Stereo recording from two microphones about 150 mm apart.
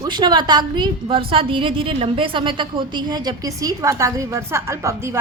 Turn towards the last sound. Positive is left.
turn(degrees=-20)  # may be behind; listen again after turning